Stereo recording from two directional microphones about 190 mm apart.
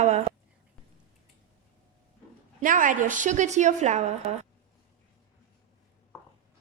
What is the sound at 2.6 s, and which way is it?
A woman's voice, 45° right (ahead or behind).